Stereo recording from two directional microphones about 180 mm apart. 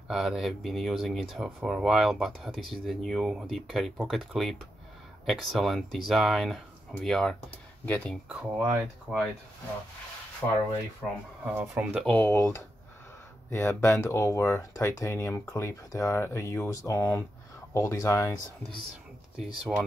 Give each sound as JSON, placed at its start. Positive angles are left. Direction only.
{"t": 0.1, "sound": "speech", "side_deg": 0}
{"t": 8.3, "sound": "speech", "side_deg": -5}
{"t": 10.4, "sound": "speech", "side_deg": 10}
{"t": 19.3, "sound": "speech", "side_deg": 0}